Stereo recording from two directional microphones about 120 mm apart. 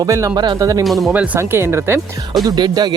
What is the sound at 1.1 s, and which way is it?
Speech, 10° right (ahead or behind).